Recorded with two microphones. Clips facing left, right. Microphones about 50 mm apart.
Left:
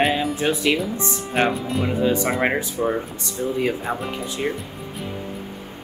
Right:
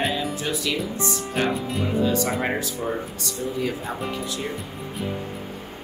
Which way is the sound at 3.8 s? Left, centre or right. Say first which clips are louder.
Left 3 dB; centre.